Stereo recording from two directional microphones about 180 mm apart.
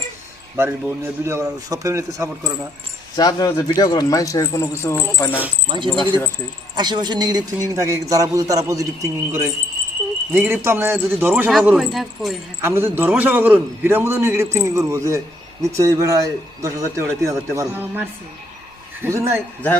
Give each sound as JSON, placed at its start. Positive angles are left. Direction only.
{"t": 0.5, "sound": "a man's voice", "side_deg": -15}
{"t": 3.2, "sound": "speech", "side_deg": 20}
{"t": 5.6, "sound": "a man's voice", "side_deg": -25}
{"t": 12.6, "sound": "a man's voice", "side_deg": -15}